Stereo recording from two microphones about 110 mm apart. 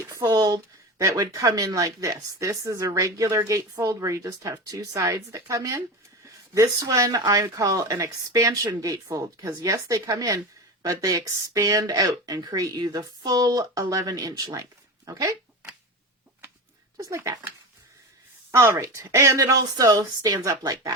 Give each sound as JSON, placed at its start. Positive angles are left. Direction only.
{"t": 0.1, "sound": "speech", "side_deg": -30}
{"t": 17.0, "sound": "speech", "side_deg": -25}
{"t": 18.5, "sound": "speech", "side_deg": -25}